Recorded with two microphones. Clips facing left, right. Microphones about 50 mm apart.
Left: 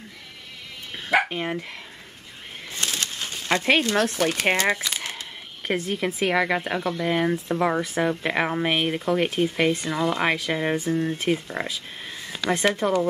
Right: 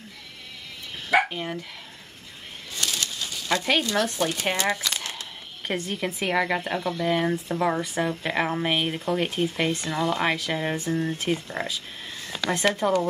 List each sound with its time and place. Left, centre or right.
1.3 s speech: left
2.7 s bird: left
3.8 s speech: left
4.7 s crumpling: centre
5.7 s speech: centre